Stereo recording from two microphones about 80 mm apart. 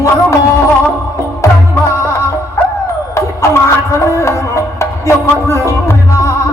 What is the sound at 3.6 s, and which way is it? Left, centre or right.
Music, left.